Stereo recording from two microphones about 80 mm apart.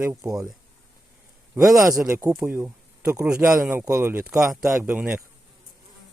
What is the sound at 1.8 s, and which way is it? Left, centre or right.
Speech, right.